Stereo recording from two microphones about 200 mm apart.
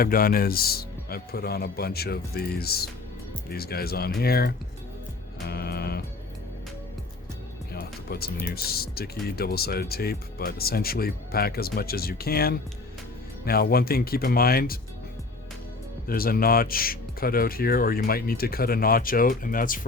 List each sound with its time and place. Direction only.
0.0 s speech: 45° left (ahead or behind)
5.5 s music: 50° left (ahead or behind)
7.7 s speech: 50° left (ahead or behind)
16.0 s speech: 50° left (ahead or behind)